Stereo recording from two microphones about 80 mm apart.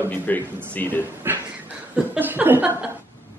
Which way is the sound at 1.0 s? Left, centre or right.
Right.